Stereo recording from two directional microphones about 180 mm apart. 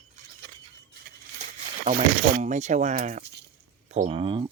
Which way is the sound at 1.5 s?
35° right (ahead or behind).